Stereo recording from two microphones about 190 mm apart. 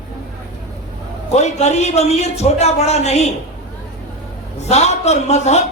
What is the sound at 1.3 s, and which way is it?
Speech, 35° left (ahead or behind).